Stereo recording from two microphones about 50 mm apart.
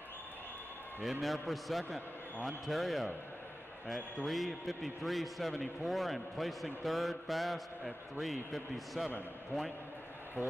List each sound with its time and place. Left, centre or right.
1.2 s a man's voice: centre